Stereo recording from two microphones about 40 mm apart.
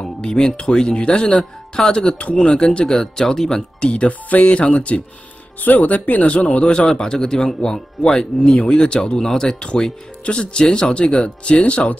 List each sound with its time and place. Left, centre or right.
0.0 s speech: centre
3.9 s speech: left
4.5 s speech: left
5.6 s speech: left
6.9 s speech: centre
9.6 s speech: left